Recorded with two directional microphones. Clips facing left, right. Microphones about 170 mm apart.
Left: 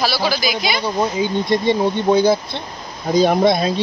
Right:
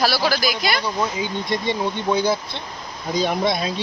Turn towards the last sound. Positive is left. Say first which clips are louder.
# left 7 dB
turn(degrees=35)  # may be behind; listen again after turning